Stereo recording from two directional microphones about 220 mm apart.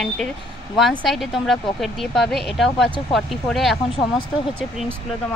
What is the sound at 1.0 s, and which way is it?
Speech, centre (ahead or behind).